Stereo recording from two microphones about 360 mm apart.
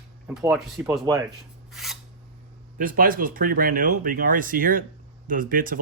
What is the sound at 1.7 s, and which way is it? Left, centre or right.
Filing, centre.